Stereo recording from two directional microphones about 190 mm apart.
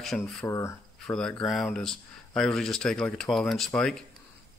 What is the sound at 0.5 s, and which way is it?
Speech, 15° left (ahead or behind).